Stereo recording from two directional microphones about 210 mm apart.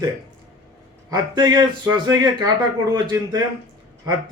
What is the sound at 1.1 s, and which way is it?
Speech, 20° right (ahead or behind).